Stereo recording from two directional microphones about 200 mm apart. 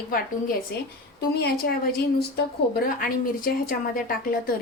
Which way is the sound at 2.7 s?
45° left (ahead or behind).